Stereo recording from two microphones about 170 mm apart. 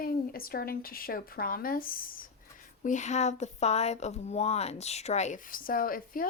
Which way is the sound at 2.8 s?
45° left (ahead or behind).